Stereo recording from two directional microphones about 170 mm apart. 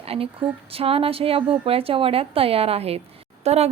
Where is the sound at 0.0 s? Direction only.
35° right (ahead or behind).